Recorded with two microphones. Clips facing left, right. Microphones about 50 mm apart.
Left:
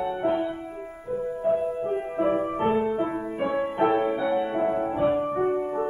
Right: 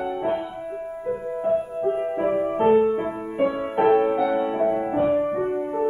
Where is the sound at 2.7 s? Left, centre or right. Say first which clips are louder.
Right 5 dB; centre.